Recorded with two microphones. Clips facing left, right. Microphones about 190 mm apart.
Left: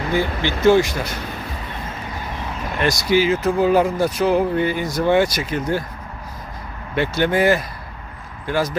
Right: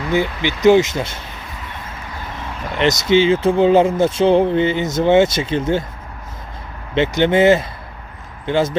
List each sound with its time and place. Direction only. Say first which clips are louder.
0.1 s speech: right 3 dB; 20° right (ahead or behind)
2.7 s speech: right 4 dB; 20° right (ahead or behind)
6.9 s speech: right 4 dB; 20° right (ahead or behind)